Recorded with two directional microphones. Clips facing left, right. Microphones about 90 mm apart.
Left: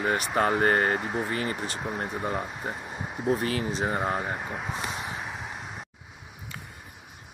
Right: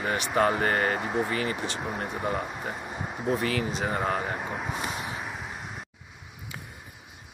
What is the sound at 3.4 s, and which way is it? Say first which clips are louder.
Speech: even; 30° left (ahead or behind).